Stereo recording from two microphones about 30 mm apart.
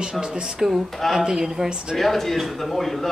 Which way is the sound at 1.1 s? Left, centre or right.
Centre.